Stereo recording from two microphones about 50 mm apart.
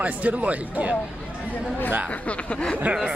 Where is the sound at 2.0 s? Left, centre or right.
Left.